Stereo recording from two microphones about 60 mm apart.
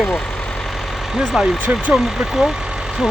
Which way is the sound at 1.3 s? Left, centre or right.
Centre.